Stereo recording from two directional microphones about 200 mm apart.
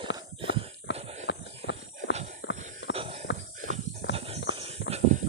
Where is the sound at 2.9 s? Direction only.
30° right (ahead or behind).